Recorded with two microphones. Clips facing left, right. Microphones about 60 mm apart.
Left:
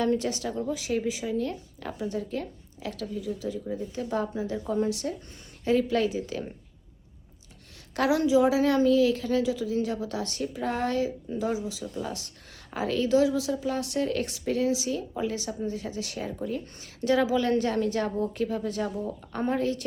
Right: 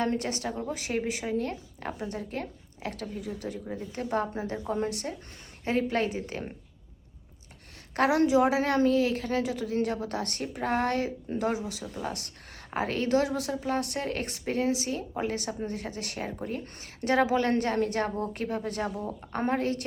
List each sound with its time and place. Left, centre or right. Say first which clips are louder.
0.0 s a woman's voice: left 3 dB; right
7.9 s a woman's voice: even; right